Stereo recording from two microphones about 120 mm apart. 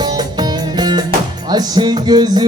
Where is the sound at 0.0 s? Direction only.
35° right (ahead or behind).